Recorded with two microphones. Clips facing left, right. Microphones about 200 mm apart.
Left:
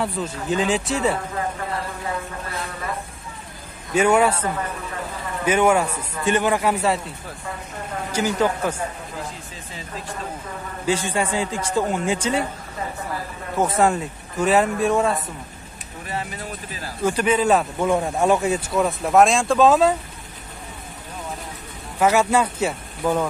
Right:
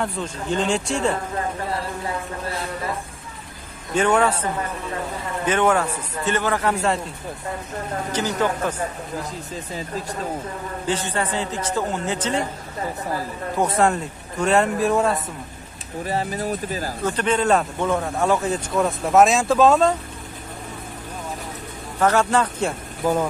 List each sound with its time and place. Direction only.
0.0 s speech: 5° left (ahead or behind)
3.9 s a man's voice: 10° left (ahead or behind)
5.4 s a man's voice: 10° left (ahead or behind)
8.1 s a man's voice: 10° left (ahead or behind)
10.9 s a man's voice: 10° left (ahead or behind)
13.6 s speech: centre (ahead or behind)
16.1 s speech: 40° right (ahead or behind)
17.0 s speech: 10° left (ahead or behind)
22.0 s a man's voice: 10° left (ahead or behind)